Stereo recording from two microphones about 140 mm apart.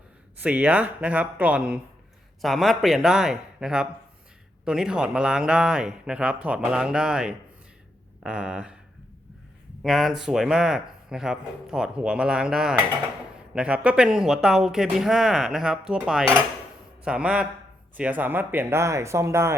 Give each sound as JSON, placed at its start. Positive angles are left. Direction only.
{"t": 0.3, "sound": "speech", "side_deg": -10}
{"t": 9.8, "sound": "speech", "side_deg": 0}